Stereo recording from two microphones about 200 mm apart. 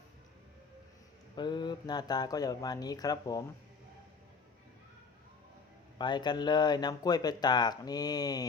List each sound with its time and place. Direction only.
1.4 s speech: 20° left (ahead or behind)
6.0 s speech: 20° left (ahead or behind)